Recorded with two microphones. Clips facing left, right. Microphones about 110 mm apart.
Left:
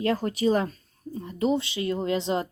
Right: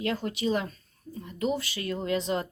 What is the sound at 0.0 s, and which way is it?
Speech, 40° left (ahead or behind).